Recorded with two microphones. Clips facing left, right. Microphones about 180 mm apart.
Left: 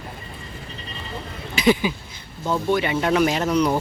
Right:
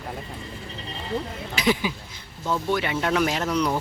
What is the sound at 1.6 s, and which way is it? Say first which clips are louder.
Speech: left 5 dB; centre (ahead or behind).